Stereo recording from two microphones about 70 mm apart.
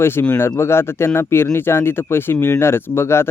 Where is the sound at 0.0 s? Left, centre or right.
Left.